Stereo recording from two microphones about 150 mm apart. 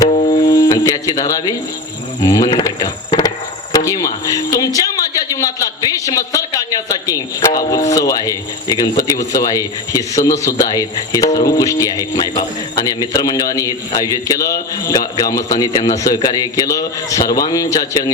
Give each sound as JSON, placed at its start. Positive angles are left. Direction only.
{"t": 0.1, "sound": "music", "side_deg": 55}
{"t": 0.4, "sound": "speech", "side_deg": 30}